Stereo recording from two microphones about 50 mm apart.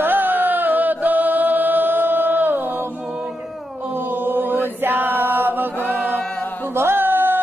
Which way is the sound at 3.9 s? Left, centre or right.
Right.